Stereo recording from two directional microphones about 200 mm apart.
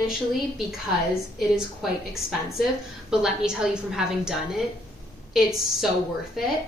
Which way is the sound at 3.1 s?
5° right (ahead or behind).